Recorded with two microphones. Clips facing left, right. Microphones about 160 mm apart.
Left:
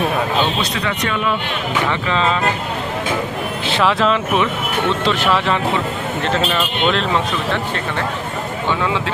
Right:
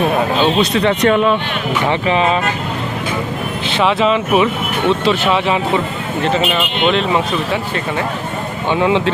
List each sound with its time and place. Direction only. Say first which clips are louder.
1.0 s speech: right 9 dB; 45° right (ahead or behind)
1.9 s speech: right 6 dB; 20° right (ahead or behind)
3.8 s speech: right 2 dB; 5° right (ahead or behind)
8.7 s speech: right 6 dB; 20° right (ahead or behind)